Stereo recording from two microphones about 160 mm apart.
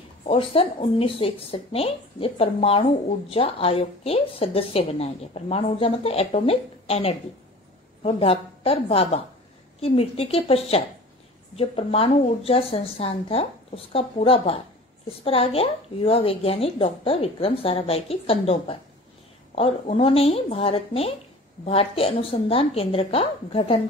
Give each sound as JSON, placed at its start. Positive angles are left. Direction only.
{"t": 0.2, "sound": "a woman's voice", "side_deg": 35}